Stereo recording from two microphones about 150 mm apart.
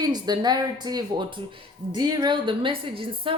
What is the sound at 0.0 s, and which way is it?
Speech, 25° right (ahead or behind).